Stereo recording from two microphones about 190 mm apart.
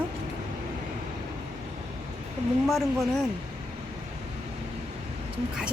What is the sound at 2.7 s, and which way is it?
Speech, centre (ahead or behind).